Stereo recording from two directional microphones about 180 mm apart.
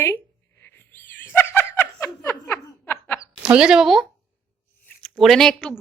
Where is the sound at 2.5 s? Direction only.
10° left (ahead or behind).